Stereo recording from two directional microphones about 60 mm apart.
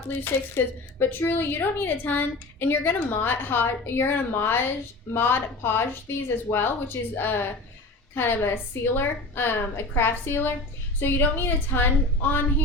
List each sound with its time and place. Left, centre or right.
0.1 s a woman's voice: left